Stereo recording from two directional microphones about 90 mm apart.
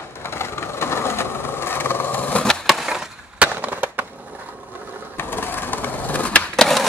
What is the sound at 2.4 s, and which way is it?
Skateboard, centre (ahead or behind).